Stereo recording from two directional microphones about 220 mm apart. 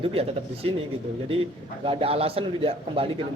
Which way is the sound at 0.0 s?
25° right (ahead or behind).